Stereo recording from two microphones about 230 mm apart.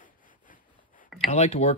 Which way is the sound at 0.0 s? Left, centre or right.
Left.